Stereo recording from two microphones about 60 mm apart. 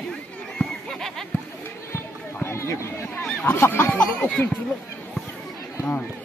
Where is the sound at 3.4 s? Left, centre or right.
Left.